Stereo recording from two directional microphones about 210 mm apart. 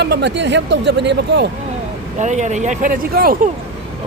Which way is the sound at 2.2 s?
35° right (ahead or behind).